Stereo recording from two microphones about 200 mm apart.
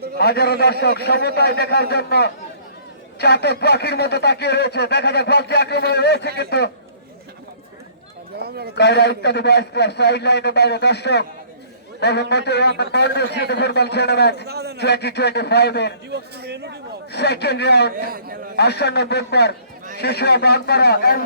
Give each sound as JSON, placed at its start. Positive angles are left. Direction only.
{"t": 0.2, "sound": "a man's voice", "side_deg": 50}
{"t": 8.4, "sound": "a man's voice", "side_deg": -50}
{"t": 8.7, "sound": "speech", "side_deg": 55}
{"t": 14.4, "sound": "a man's voice", "side_deg": -55}
{"t": 14.8, "sound": "speech", "side_deg": 55}
{"t": 16.0, "sound": "speech", "side_deg": -55}
{"t": 17.1, "sound": "speech", "side_deg": 55}
{"t": 17.9, "sound": "a man's voice", "side_deg": -45}
{"t": 18.5, "sound": "a man's voice", "side_deg": 55}